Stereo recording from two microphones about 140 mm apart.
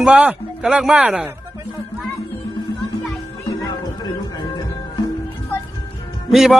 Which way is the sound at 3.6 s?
30° left (ahead or behind).